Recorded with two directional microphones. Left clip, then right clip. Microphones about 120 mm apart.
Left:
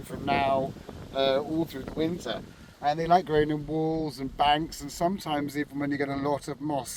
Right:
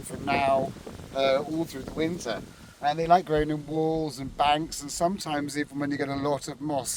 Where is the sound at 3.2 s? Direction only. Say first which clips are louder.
Left 1 dB; 50° right (ahead or behind).